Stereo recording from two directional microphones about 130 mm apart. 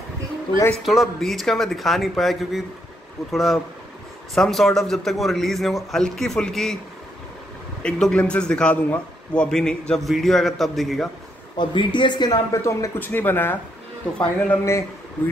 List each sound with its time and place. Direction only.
0.5 s a man's voice: 35° left (ahead or behind)
0.8 s a man's voice: centre (ahead or behind)
7.8 s a man's voice: 10° left (ahead or behind)
11.5 s a man's voice: 35° left (ahead or behind)
12.6 s speech: 20° left (ahead or behind)
14.6 s a man's voice: 20° left (ahead or behind)